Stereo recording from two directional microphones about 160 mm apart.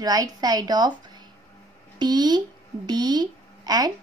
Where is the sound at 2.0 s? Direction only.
25° right (ahead or behind).